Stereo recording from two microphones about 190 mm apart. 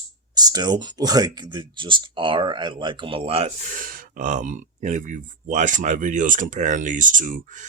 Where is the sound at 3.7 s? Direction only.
45° right (ahead or behind).